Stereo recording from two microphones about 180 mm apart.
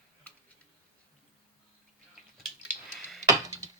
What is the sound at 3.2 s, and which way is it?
Wood, 20° right (ahead or behind).